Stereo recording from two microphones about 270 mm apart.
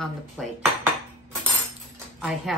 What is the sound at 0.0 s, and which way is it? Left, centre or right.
Speech, centre.